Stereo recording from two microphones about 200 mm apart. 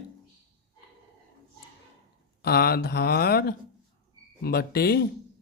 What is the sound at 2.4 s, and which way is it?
Speech, 50° left (ahead or behind).